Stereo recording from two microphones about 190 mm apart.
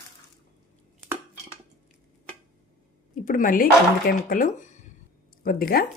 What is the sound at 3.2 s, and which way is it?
Speech, 45° left (ahead or behind).